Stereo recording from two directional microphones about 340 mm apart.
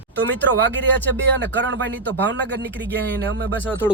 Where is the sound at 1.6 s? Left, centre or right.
Right.